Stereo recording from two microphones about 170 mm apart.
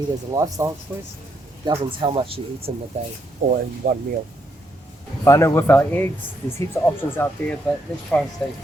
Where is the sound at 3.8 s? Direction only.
55° right (ahead or behind).